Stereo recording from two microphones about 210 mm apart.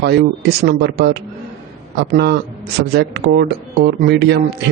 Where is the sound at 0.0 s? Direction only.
50° right (ahead or behind).